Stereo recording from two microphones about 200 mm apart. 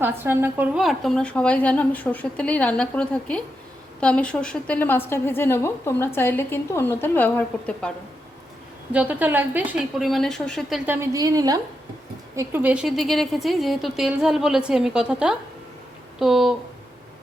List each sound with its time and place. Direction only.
0.0 s a woman's voice: 10° right (ahead or behind); by 7.9 s 5° left (ahead or behind)
8.9 s a woman's voice: 5° right (ahead or behind)
10.8 s a woman's voice: 15° right (ahead or behind)